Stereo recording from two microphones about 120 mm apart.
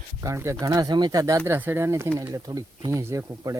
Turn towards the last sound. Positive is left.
turn(degrees=-25)  # may be behind; listen again after turning